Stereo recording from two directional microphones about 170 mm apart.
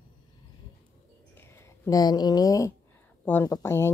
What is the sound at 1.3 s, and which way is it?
Speech, 15° left (ahead or behind).